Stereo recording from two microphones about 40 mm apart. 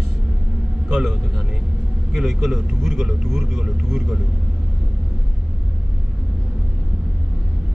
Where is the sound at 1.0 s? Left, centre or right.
Centre.